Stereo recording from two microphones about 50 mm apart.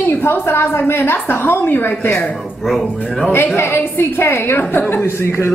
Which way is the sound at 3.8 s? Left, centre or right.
Left.